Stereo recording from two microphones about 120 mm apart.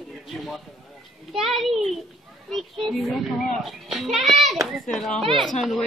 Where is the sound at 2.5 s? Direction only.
Centre (ahead or behind).